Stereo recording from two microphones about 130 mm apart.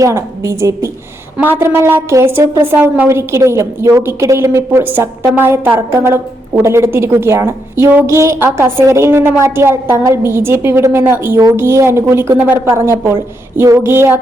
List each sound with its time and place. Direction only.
0.0 s a woman's voice: 25° right (ahead or behind)